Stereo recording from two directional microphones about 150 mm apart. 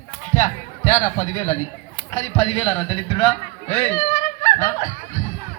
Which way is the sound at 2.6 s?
10° left (ahead or behind).